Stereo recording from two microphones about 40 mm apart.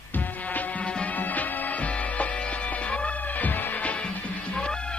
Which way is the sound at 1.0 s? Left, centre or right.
Left.